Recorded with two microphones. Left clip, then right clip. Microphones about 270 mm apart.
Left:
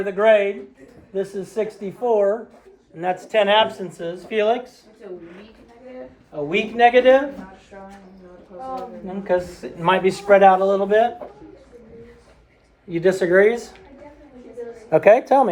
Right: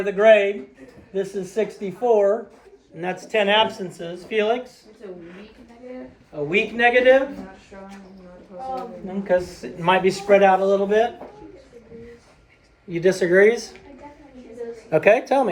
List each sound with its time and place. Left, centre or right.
0.0 s speech: centre
3.0 s a man's voice: left
6.3 s speech: left
9.0 s a man's voice: left
12.9 s speech: centre
14.8 s a man's voice: centre